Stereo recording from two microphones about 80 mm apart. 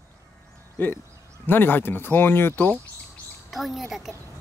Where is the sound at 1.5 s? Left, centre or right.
Left.